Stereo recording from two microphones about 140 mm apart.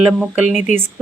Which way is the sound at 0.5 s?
55° left (ahead or behind).